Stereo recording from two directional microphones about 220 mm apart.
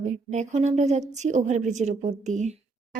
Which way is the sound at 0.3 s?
30° right (ahead or behind).